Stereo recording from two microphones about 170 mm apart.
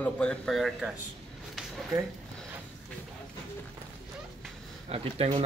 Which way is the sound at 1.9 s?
15° right (ahead or behind).